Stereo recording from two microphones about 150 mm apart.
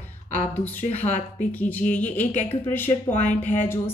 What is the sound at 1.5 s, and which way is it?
Speech, 10° left (ahead or behind).